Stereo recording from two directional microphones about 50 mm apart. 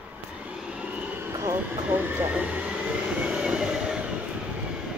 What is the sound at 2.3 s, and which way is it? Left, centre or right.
Vehicle, right.